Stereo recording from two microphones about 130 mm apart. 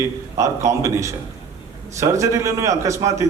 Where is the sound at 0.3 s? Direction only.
25° right (ahead or behind).